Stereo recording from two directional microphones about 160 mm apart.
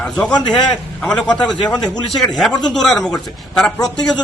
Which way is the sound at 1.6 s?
25° left (ahead or behind).